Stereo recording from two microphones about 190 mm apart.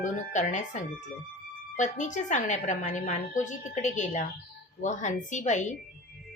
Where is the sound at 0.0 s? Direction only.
40° left (ahead or behind).